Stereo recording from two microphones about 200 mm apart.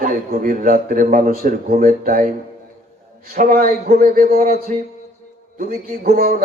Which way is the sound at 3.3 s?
45° right (ahead or behind).